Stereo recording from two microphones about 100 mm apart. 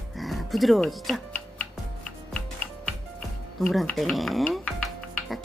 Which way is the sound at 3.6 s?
Centre (ahead or behind).